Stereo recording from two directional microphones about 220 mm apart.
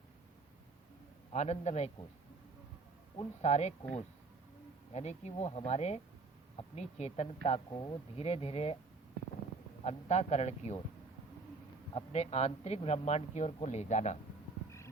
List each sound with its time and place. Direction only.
1.3 s speech: 30° left (ahead or behind)
3.2 s speech: 30° left (ahead or behind)
4.9 s speech: 30° left (ahead or behind)
9.8 s speech: 30° left (ahead or behind)
11.9 s speech: 30° left (ahead or behind)